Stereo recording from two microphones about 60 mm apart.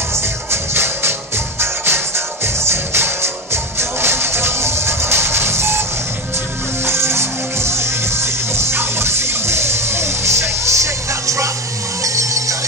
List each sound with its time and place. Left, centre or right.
0.1 s music: right
6.9 s music: right